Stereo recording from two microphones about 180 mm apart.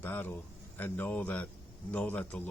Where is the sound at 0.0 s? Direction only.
10° left (ahead or behind).